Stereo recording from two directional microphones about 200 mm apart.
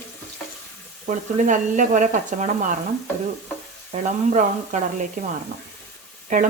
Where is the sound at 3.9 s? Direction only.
35° right (ahead or behind).